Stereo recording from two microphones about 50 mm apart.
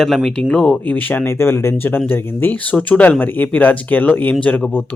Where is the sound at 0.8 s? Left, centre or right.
Left.